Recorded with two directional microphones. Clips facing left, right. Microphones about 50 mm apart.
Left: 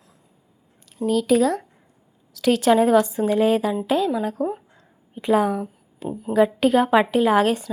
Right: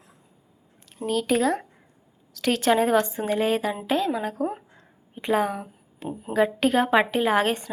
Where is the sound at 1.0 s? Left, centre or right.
Centre.